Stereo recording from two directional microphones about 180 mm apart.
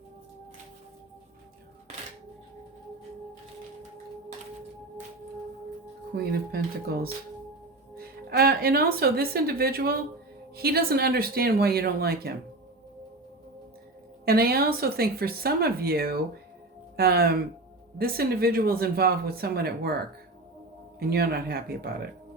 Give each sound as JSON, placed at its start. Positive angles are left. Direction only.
{"t": 6.1, "sound": "speech", "side_deg": -60}
{"t": 14.3, "sound": "speech", "side_deg": -60}
{"t": 21.0, "sound": "speech", "side_deg": -60}